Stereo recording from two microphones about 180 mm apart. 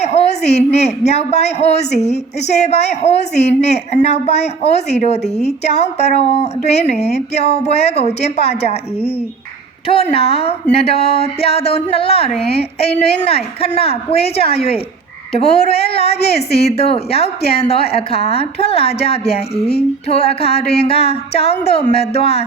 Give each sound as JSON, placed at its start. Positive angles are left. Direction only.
{"t": 0.0, "sound": "a sound", "side_deg": 35}
{"t": 0.7, "sound": "speech", "side_deg": 35}
{"t": 16.1, "sound": "a woman's voice", "side_deg": 65}
{"t": 16.6, "sound": "speech", "side_deg": 35}